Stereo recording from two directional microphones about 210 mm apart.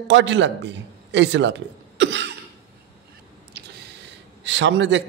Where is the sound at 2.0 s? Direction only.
55° right (ahead or behind).